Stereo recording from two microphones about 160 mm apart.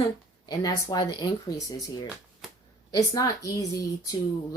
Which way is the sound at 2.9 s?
20° left (ahead or behind).